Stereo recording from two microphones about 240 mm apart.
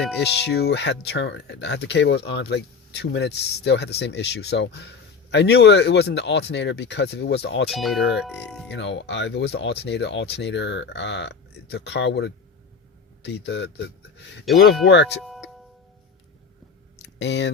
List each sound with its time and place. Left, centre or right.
0.4 s speech: left
7.7 s speech: centre
8.7 s speech: left
14.5 s speech: centre
14.8 s speech: left
15.2 s tubular bells: centre
17.0 s a sound: left